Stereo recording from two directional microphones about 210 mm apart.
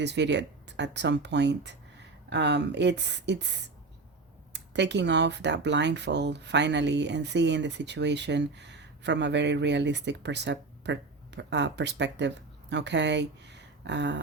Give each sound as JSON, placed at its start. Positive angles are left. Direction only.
{"t": 0.0, "sound": "speech", "side_deg": -55}